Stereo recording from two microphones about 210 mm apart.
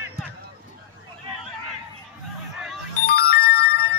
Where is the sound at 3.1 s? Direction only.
45° left (ahead or behind).